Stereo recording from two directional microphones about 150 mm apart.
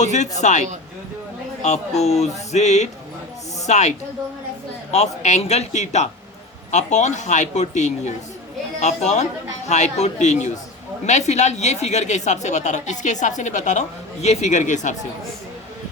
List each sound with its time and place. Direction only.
0.0 s a woman's voice: 50° left (ahead or behind)
1.6 s a woman's voice: 50° left (ahead or behind)